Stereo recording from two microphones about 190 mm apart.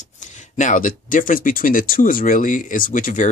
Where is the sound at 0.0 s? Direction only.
40° left (ahead or behind).